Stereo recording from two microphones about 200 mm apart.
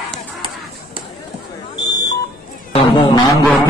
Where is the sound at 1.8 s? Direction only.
20° left (ahead or behind).